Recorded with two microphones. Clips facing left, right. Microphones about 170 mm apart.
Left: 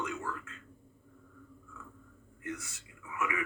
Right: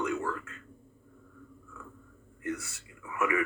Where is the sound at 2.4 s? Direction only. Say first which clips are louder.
Right 5 dB; 65° right (ahead or behind).